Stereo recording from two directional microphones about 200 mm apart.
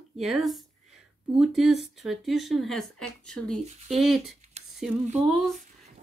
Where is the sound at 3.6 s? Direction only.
35° right (ahead or behind).